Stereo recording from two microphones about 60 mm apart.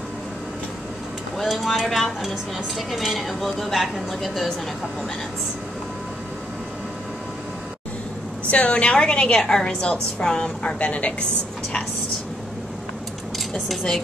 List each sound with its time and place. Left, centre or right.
1.4 s a woman's voice: centre
8.5 s a woman's voice: left
10.8 s a woman's voice: left
13.7 s a woman's voice: centre